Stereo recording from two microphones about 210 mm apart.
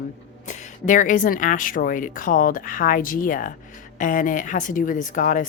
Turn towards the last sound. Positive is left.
turn(degrees=40)  # may be behind; listen again after turning